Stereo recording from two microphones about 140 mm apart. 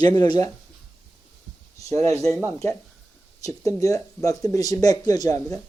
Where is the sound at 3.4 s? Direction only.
25° left (ahead or behind).